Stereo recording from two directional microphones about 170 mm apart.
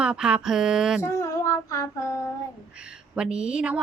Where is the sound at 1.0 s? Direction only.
15° left (ahead or behind).